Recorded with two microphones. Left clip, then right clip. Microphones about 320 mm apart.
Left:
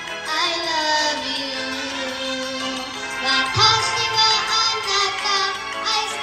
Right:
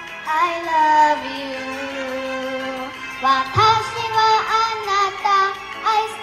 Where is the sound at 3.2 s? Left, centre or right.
Centre.